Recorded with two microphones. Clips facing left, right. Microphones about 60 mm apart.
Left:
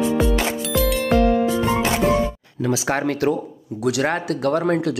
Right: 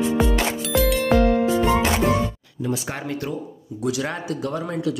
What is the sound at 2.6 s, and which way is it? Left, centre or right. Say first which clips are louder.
Speech: left 6 dB; left.